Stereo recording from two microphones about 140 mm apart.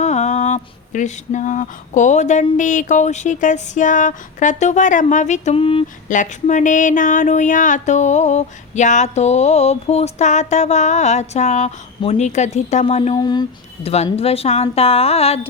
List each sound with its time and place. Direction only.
0.0 s speech: 55° left (ahead or behind)
6.1 s speech: 65° left (ahead or behind)
13.1 s speech: 30° left (ahead or behind)
13.8 s speech: 45° left (ahead or behind)